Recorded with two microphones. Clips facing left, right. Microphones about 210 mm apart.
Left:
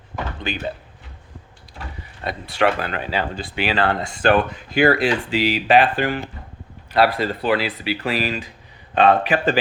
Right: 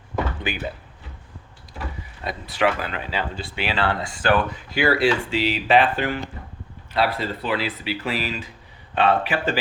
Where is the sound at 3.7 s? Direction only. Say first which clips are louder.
Left 3 dB; 45° left (ahead or behind).